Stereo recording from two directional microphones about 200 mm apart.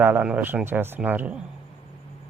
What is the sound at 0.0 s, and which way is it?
Speech, 10° right (ahead or behind).